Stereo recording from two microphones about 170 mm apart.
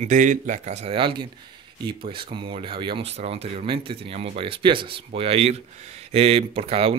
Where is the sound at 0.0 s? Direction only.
50° right (ahead or behind).